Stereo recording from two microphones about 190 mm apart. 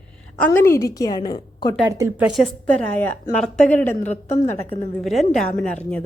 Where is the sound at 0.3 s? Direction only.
10° left (ahead or behind).